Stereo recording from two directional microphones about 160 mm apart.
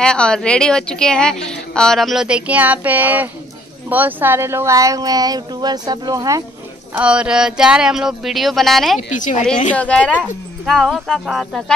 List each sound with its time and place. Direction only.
0.0 s a woman's voice: 5° left (ahead or behind); by 6.4 s 20° right (ahead or behind)
6.9 s a woman's voice: 10° right (ahead or behind)
9.1 s a woman's voice: 50° left (ahead or behind)
9.8 s a woman's voice: 5° left (ahead or behind)